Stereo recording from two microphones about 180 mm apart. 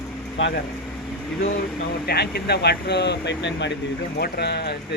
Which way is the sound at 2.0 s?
60° left (ahead or behind).